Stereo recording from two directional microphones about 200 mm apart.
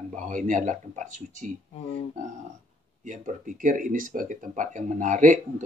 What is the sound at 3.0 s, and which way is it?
Speech, 40° right (ahead or behind).